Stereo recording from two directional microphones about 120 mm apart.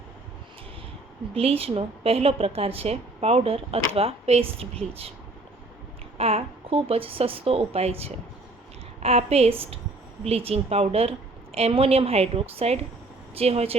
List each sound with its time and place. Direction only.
1.3 s a woman's voice: 50° right (ahead or behind)
6.1 s a woman's voice: 55° right (ahead or behind)